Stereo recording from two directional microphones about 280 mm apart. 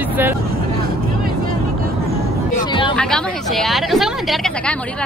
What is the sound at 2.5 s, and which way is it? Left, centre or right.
Speech, centre.